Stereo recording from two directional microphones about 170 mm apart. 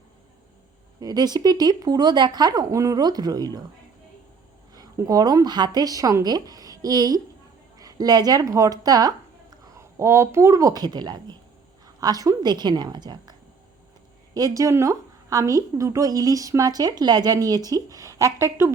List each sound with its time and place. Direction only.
0.9 s a woman's voice: 20° right (ahead or behind)
4.7 s a woman's voice: 20° right (ahead or behind)
14.3 s a woman's voice: 20° right (ahead or behind)